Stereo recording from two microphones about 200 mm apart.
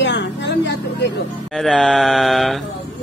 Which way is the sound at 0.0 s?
65° left (ahead or behind).